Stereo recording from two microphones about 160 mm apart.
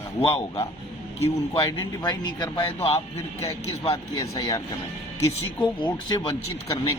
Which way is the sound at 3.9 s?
20° left (ahead or behind).